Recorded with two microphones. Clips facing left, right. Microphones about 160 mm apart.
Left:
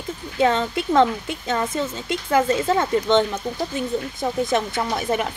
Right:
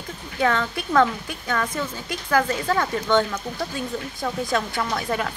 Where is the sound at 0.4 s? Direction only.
20° left (ahead or behind).